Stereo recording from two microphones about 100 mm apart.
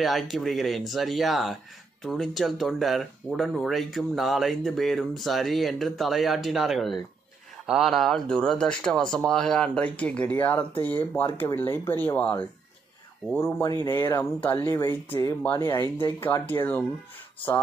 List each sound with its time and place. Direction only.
0.0 s speech: centre (ahead or behind); by 16.8 s 20° left (ahead or behind)